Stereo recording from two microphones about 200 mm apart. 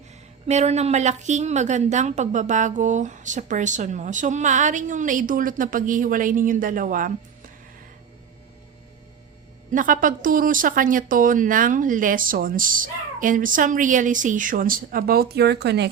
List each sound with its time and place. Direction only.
0.4 s a woman's voice: 35° right (ahead or behind)
9.7 s speech: 40° right (ahead or behind)